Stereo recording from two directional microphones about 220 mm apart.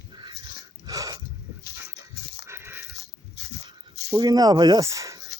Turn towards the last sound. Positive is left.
turn(degrees=-15)  # may be behind; listen again after turning